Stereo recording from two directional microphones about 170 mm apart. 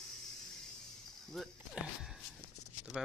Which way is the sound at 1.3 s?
Centre (ahead or behind).